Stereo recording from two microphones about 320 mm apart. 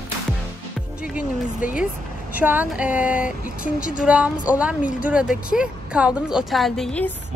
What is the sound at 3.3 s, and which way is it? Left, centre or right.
Speech, left.